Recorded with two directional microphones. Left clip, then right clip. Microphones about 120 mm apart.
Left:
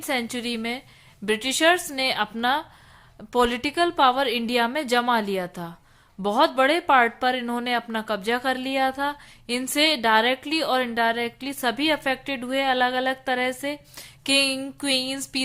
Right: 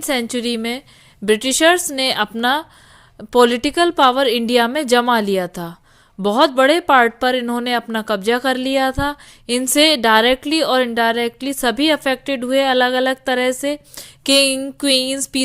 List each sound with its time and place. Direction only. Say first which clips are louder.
0.0 s speech: right 7 dB; 45° right (ahead or behind)